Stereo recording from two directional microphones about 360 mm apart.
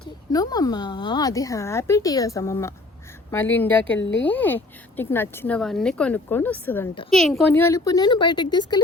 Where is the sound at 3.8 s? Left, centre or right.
Left.